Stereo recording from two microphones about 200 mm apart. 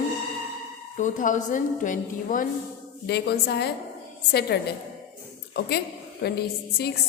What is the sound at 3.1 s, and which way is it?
A woman's voice, 55° left (ahead or behind).